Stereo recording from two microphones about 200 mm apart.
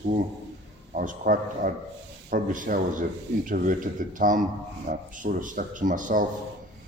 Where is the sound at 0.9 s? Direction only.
45° right (ahead or behind).